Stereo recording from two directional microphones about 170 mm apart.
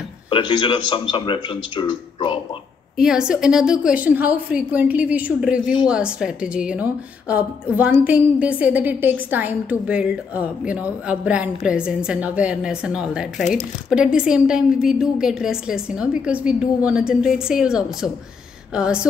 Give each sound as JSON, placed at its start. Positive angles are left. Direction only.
{"t": 0.3, "sound": "a man's voice", "side_deg": 30}
{"t": 3.0, "sound": "a woman's voice", "side_deg": -5}